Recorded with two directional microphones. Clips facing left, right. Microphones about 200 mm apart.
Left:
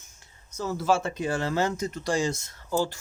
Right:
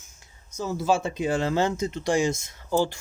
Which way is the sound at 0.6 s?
15° right (ahead or behind).